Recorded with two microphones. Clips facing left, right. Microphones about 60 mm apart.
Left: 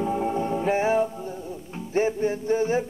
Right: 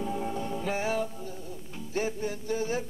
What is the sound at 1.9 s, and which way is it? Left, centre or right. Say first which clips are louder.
Music: left 8 dB; left.